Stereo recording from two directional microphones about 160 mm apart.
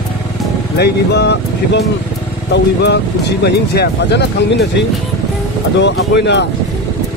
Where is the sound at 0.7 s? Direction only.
90° left.